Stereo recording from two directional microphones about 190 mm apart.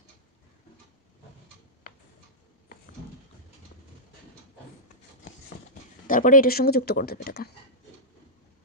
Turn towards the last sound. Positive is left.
turn(degrees=55)  # may be behind; listen again after turning